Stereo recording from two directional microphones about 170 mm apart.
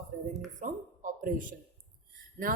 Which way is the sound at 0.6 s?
50° right (ahead or behind).